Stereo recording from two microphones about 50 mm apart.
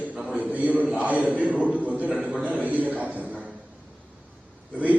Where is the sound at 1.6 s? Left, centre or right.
Right.